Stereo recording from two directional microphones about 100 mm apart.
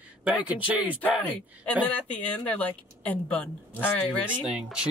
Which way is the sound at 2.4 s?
15° left (ahead or behind).